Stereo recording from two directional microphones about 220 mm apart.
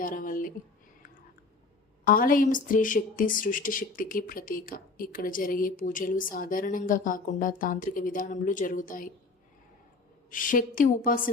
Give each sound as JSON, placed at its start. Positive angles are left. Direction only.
{"t": 0.0, "sound": "speech", "side_deg": 40}
{"t": 2.0, "sound": "speech", "side_deg": 40}
{"t": 10.2, "sound": "speech", "side_deg": 35}